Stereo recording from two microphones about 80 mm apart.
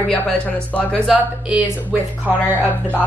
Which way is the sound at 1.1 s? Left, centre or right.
Centre.